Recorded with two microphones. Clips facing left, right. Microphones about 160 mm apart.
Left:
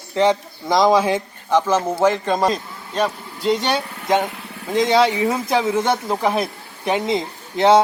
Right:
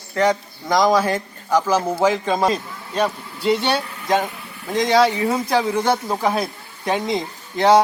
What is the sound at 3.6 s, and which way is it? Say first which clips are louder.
Speech: even; 15° left (ahead or behind).